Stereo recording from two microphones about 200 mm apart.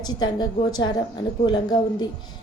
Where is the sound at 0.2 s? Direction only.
20° left (ahead or behind).